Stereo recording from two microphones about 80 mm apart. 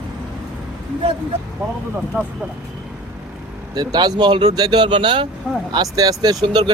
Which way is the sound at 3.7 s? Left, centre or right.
Right.